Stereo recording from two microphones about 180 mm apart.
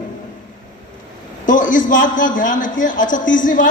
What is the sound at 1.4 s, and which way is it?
A man's voice, 45° left (ahead or behind).